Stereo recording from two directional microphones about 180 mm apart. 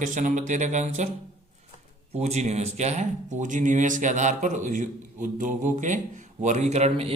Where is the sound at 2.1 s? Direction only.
35° right (ahead or behind).